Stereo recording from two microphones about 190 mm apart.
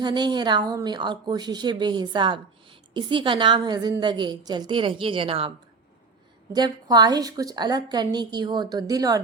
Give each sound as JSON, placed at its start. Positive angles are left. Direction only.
{"t": 0.0, "sound": "speech", "side_deg": -25}
{"t": 6.5, "sound": "speech", "side_deg": -20}